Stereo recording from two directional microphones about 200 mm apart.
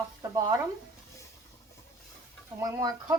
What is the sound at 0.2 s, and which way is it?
Speech, 20° right (ahead or behind).